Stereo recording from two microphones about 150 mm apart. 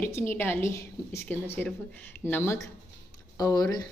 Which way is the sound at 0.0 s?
15° left (ahead or behind).